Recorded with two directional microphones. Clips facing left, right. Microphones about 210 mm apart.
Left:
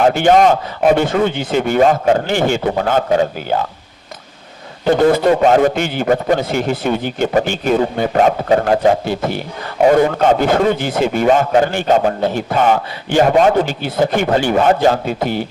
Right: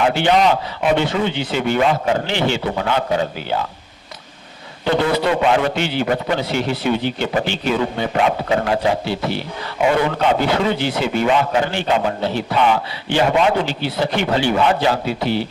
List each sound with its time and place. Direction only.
0.0 s a man's voice: 45° left (ahead or behind)
4.9 s a man's voice: 45° left (ahead or behind)